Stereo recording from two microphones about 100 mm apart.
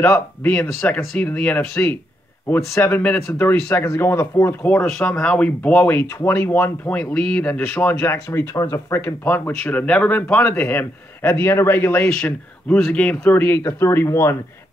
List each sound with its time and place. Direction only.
0.0 s speech: 15° left (ahead or behind)